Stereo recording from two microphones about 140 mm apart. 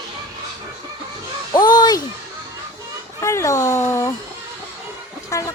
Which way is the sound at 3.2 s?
20° left (ahead or behind).